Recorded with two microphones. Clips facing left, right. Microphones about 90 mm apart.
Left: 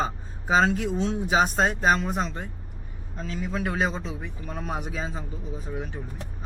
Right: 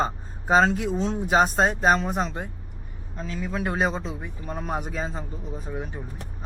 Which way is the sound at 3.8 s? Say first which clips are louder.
Right 2 dB; 5° right (ahead or behind).